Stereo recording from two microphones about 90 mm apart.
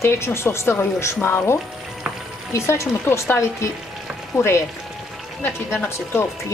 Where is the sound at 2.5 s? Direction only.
30° left (ahead or behind).